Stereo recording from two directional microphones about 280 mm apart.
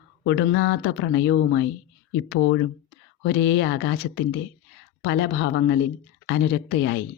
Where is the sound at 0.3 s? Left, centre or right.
Left.